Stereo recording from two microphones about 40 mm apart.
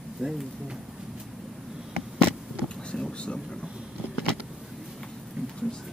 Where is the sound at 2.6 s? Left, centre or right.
Left.